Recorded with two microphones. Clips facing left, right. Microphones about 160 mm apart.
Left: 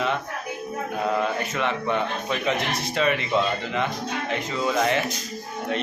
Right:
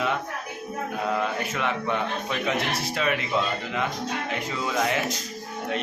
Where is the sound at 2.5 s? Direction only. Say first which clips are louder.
Left 1 dB; 5° right (ahead or behind).